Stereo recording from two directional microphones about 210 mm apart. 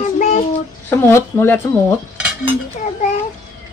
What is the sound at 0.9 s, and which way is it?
Speech, 10° left (ahead or behind).